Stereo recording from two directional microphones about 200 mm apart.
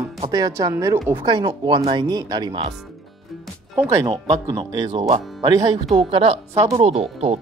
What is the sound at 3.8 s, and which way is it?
Speech, 15° right (ahead or behind).